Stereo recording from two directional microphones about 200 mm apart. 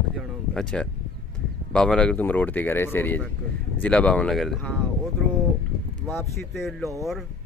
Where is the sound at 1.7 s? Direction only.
5° left (ahead or behind).